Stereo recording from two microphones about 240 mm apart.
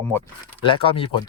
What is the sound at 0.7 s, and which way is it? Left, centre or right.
Speech, left.